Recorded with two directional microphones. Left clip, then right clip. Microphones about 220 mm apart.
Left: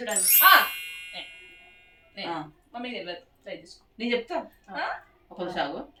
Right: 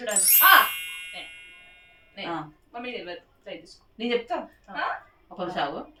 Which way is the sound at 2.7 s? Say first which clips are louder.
Even; 10° left (ahead or behind).